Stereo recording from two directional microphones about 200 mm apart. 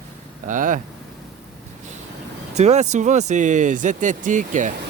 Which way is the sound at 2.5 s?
35° right (ahead or behind).